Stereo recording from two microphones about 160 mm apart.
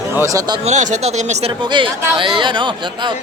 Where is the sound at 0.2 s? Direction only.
20° right (ahead or behind).